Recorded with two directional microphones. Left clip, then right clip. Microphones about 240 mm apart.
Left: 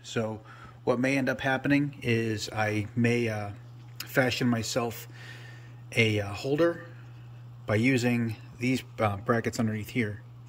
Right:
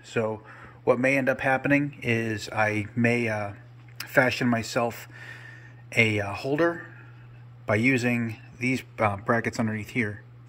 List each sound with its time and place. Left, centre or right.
0.1 s a man's voice: centre